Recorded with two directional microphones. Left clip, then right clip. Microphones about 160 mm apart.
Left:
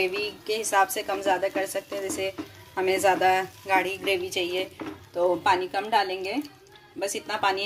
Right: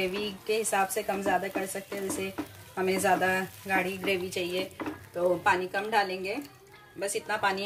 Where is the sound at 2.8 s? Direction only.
60° left (ahead or behind).